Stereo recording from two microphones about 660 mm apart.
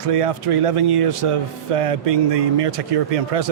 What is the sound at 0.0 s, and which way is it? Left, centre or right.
A man's voice, right.